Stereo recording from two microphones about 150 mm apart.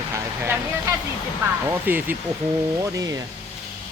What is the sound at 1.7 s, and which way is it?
Speech, 15° right (ahead or behind).